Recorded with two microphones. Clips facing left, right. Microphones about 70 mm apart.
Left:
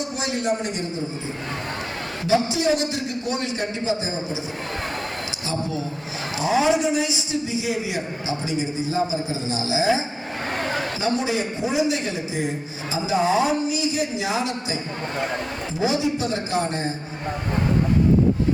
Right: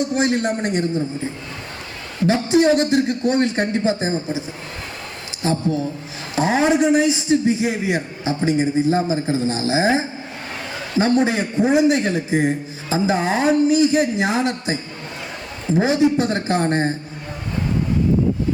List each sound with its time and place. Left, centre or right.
0.0 s a man's voice: right
2.2 s a man's voice: right
15.8 s a man's voice: right